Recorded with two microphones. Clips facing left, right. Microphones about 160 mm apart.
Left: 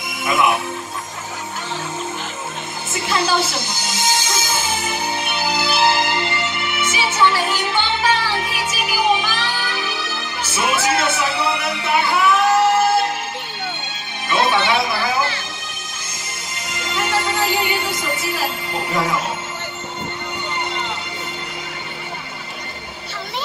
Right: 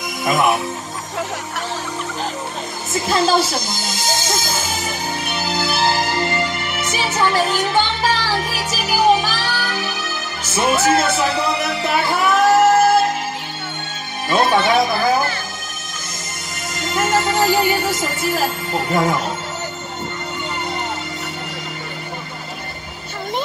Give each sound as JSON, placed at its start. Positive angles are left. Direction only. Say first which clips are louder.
{"t": 0.2, "sound": "speech", "louder": "right 1 dB", "side_deg": -40}
{"t": 2.9, "sound": "speech", "louder": "right 4 dB", "side_deg": -40}
{"t": 4.8, "sound": "music", "louder": "left 1 dB", "side_deg": -40}
{"t": 10.5, "sound": "speech", "louder": "right 4 dB", "side_deg": -40}
{"t": 11.8, "sound": "music", "louder": "left 2 dB", "side_deg": -40}
{"t": 14.3, "sound": "speech", "louder": "right 3 dB", "side_deg": -45}
{"t": 16.6, "sound": "music", "louder": "right 4 dB", "side_deg": -45}